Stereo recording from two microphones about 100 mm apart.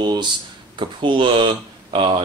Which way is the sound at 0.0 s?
45° right (ahead or behind).